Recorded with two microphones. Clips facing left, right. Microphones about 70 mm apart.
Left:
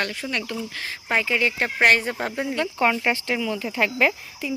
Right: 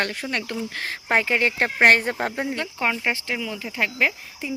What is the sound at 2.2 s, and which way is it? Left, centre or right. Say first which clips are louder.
Speech: right 1 dB; right.